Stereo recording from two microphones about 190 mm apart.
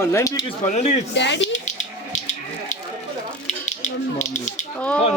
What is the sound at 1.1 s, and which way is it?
Speech, 65° left (ahead or behind).